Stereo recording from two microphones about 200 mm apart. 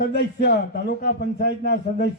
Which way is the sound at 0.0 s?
55° left (ahead or behind).